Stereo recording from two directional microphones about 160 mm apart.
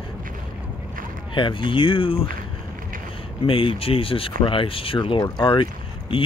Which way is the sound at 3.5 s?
35° left (ahead or behind).